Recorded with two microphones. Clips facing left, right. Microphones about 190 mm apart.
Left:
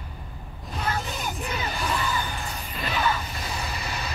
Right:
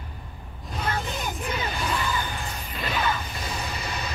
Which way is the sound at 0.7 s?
Centre (ahead or behind).